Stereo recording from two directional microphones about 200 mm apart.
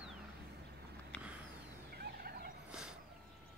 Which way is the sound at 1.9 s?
50° right (ahead or behind).